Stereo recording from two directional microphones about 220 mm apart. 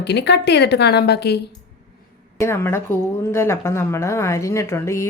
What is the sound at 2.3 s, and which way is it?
A woman's voice, 10° left (ahead or behind).